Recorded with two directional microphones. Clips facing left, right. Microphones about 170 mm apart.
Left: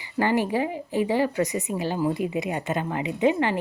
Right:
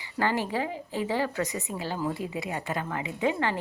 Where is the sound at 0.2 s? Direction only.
15° left (ahead or behind).